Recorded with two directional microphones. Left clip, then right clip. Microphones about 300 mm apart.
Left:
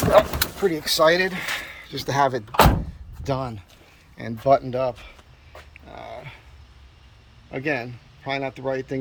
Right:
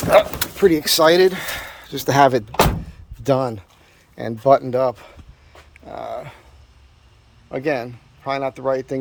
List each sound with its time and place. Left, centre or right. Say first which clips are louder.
0.1 s speech: right 3 dB; right
5.7 s dog: right 9 dB; centre
7.5 s speech: right 4 dB; centre